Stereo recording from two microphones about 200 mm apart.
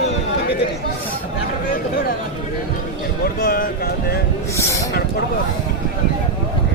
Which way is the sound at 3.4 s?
50° left (ahead or behind).